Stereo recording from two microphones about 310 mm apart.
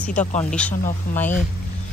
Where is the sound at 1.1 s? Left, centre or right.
Left.